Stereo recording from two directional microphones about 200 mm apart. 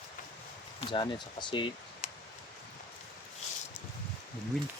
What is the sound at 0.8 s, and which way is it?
Speech, 25° left (ahead or behind).